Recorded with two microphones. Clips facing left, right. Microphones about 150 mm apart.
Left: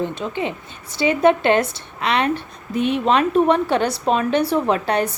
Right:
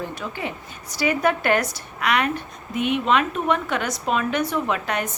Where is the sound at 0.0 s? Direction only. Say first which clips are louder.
Left 6 dB; 20° left (ahead or behind).